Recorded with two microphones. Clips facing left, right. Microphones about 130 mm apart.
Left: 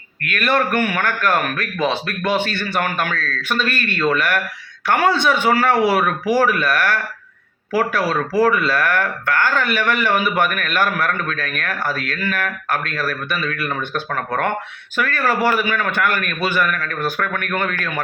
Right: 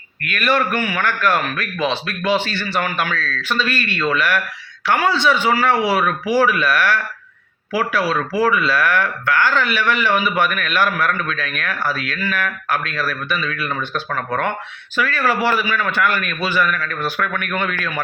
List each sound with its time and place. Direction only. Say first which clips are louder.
0.2 s speech: even; 50° left (ahead or behind)